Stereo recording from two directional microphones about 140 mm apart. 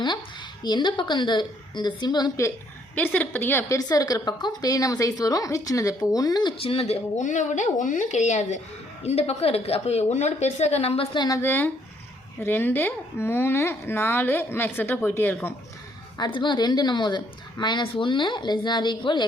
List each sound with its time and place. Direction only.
0.6 s a woman's voice: 30° left (ahead or behind)
2.9 s speech: 10° left (ahead or behind)
3.8 s a woman's voice: 25° left (ahead or behind)
6.6 s a woman's voice: 45° left (ahead or behind)
11.3 s speech: 15° left (ahead or behind)
16.1 s a woman's voice: 30° left (ahead or behind)